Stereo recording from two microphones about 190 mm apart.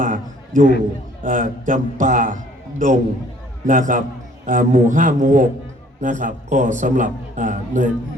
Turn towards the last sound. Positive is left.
turn(degrees=-40)  # may be behind; listen again after turning